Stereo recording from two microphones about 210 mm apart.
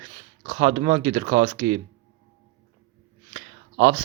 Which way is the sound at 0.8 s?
40° right (ahead or behind).